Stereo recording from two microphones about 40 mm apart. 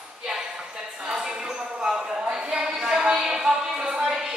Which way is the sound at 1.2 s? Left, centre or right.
Centre.